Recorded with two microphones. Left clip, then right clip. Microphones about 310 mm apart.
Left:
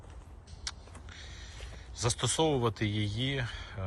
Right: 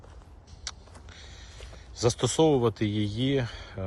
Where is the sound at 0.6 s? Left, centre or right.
Centre.